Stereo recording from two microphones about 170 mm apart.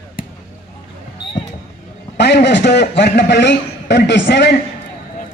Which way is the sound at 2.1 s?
90° left.